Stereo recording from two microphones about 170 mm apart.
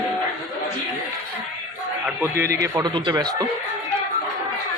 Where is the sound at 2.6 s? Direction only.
20° right (ahead or behind).